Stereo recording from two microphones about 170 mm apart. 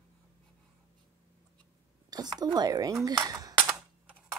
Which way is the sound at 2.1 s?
25° right (ahead or behind).